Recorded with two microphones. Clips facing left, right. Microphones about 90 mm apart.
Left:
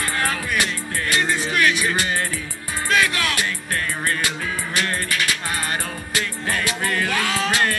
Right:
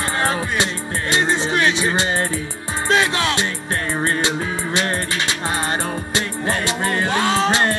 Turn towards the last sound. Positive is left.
turn(degrees=-30)  # may be behind; listen again after turning